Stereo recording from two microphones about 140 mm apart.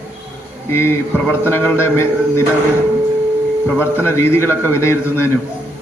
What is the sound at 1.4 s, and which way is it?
A man's voice, 15° left (ahead or behind).